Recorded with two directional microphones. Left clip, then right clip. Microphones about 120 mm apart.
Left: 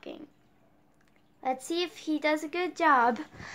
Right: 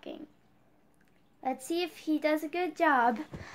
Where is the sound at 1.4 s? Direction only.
10° right (ahead or behind).